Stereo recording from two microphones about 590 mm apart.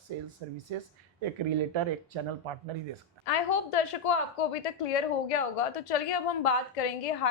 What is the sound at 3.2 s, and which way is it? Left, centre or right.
A woman's voice, left.